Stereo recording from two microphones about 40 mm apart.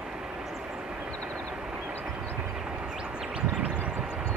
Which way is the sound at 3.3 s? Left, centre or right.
Right.